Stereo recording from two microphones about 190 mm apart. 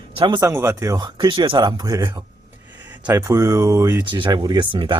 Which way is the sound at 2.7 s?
10° right (ahead or behind).